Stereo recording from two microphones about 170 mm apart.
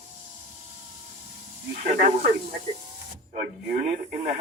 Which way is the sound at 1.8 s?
50° right (ahead or behind).